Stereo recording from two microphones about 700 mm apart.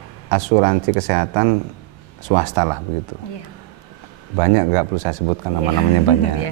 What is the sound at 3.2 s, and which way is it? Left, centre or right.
Speech, left.